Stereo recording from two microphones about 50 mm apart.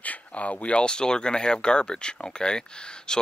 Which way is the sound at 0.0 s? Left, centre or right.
Left.